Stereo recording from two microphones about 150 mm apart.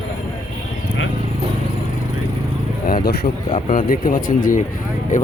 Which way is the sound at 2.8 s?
80° left.